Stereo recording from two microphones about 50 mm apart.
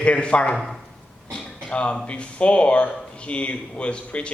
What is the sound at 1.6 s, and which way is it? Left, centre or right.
Speech, left.